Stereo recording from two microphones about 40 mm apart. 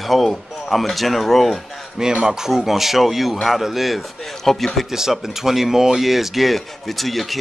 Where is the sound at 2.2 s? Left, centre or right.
Centre.